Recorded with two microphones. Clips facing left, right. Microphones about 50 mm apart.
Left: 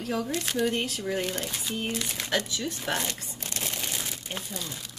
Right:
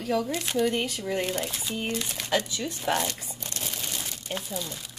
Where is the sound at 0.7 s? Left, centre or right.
Centre.